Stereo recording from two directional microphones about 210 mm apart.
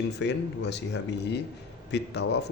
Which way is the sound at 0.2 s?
55° left (ahead or behind).